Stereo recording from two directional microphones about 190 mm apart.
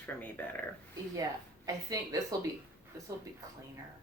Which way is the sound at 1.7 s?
15° right (ahead or behind).